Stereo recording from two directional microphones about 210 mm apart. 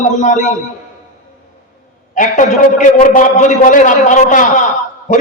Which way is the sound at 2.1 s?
35° left (ahead or behind).